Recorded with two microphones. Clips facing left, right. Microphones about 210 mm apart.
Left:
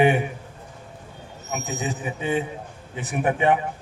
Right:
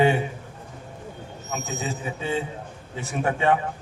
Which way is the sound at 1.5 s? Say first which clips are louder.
Left 2 dB; 15° left (ahead or behind).